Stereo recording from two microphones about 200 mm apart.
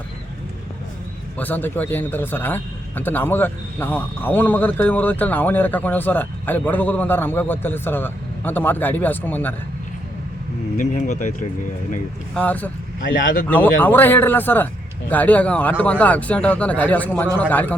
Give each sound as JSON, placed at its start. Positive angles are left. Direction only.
{"t": 1.4, "sound": "a man's voice", "side_deg": 10}
{"t": 10.8, "sound": "speech", "side_deg": 35}
{"t": 12.3, "sound": "a man's voice", "side_deg": 5}
{"t": 13.1, "sound": "speech", "side_deg": 70}
{"t": 13.5, "sound": "a man's voice", "side_deg": 10}